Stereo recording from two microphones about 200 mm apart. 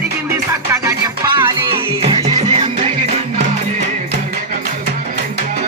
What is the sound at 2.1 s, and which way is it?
Music, 30° right (ahead or behind).